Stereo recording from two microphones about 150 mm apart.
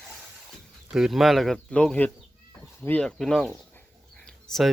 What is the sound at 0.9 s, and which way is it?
Speech, 5° right (ahead or behind).